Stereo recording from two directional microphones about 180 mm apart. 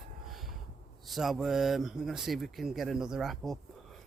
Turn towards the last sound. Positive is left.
turn(degrees=0)  # may be behind; listen again after turning